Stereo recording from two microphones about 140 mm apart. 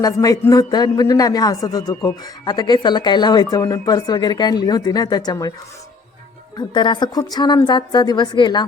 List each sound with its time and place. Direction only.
0.0 s speech: 25° left (ahead or behind)
6.6 s a woman's voice: 30° left (ahead or behind)